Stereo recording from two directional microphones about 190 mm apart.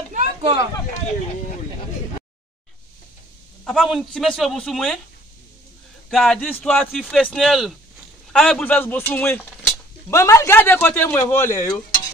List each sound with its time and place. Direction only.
0.1 s a sound: 35° right (ahead or behind)
3.6 s a man's voice: centre (ahead or behind)
6.0 s a man's voice: 5° left (ahead or behind)